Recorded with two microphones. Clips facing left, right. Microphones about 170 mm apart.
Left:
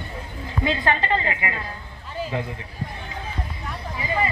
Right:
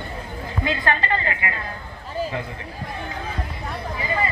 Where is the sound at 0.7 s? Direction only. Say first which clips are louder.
Left 1 dB; 20° left (ahead or behind).